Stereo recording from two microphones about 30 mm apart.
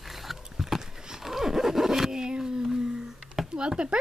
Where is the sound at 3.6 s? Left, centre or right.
Right.